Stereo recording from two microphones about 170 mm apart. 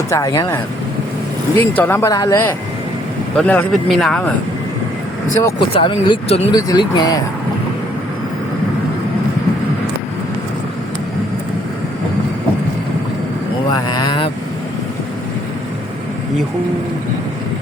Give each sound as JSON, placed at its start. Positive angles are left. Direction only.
{"t": 0.1, "sound": "speech", "side_deg": 20}
{"t": 3.3, "sound": "speech", "side_deg": 10}
{"t": 5.4, "sound": "speech", "side_deg": 15}
{"t": 5.7, "sound": "speech", "side_deg": 30}
{"t": 6.5, "sound": "speech", "side_deg": 25}
{"t": 13.7, "sound": "speech", "side_deg": 25}